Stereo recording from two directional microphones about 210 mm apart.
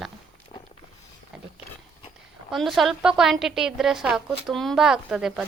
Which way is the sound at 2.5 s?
Centre (ahead or behind).